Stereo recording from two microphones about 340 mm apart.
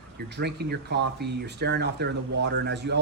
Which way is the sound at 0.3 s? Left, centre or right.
Right.